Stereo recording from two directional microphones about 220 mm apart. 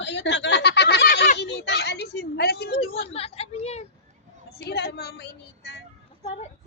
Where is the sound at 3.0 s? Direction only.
25° left (ahead or behind).